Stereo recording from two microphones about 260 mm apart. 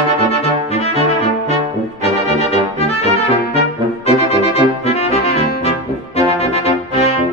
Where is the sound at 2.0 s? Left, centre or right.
Left.